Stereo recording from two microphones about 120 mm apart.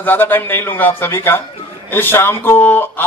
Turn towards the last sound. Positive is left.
turn(degrees=15)  # may be behind; listen again after turning